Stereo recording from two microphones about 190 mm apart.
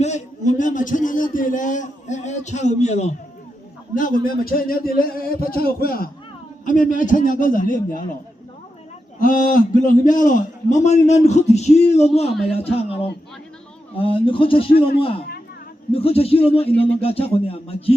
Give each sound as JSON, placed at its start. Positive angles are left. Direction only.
{"t": 0.0, "sound": "a man's voice", "side_deg": 40}
{"t": 3.9, "sound": "a man's voice", "side_deg": 45}
{"t": 9.2, "sound": "a man's voice", "side_deg": 45}
{"t": 15.9, "sound": "a man's voice", "side_deg": 30}